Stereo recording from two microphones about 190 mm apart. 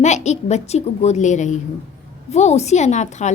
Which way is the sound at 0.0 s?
35° left (ahead or behind).